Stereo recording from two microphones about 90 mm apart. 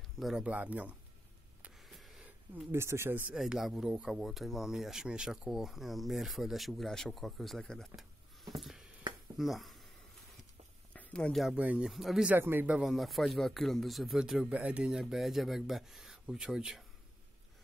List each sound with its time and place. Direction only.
0.2 s speech: 5° right (ahead or behind)
0.5 s speech: 20° right (ahead or behind)
1.8 s a sound: centre (ahead or behind)
2.7 s speech: 30° right (ahead or behind)
3.3 s speech: 5° right (ahead or behind)
7.9 s a sound: centre (ahead or behind)
9.4 s speech: centre (ahead or behind)
10.9 s a sound: 15° left (ahead or behind)
11.5 s speech: 15° right (ahead or behind)
11.9 s speech: centre (ahead or behind)
12.3 s speech: 25° right (ahead or behind)
12.6 s speech: 15° right (ahead or behind)
12.9 s speech: centre (ahead or behind)
14.5 s speech: 15° right (ahead or behind)